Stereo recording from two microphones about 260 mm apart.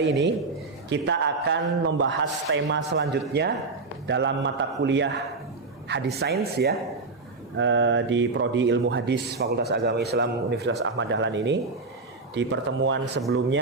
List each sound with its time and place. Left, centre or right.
0.0 s a man's voice: right